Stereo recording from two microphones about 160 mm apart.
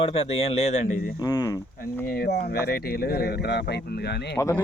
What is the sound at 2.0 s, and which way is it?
Speech, 70° left (ahead or behind).